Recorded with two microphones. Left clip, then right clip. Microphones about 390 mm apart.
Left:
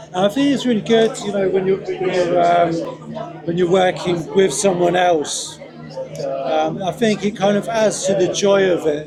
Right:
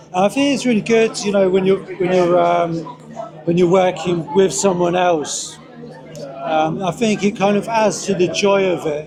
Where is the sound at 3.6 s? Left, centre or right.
Centre.